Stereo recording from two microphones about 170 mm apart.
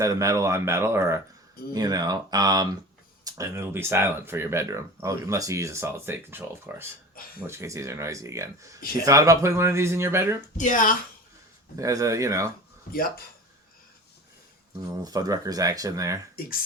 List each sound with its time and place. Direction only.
0.0 s speech: 20° right (ahead or behind)
10.6 s speech: 50° left (ahead or behind)
11.8 s speech: 20° right (ahead or behind)
14.8 s speech: 20° right (ahead or behind)
16.3 s speech: 60° left (ahead or behind)